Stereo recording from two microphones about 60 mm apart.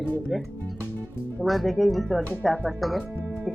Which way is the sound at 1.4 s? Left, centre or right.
Centre.